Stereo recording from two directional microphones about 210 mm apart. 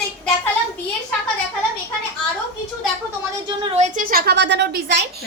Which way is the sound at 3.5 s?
25° right (ahead or behind).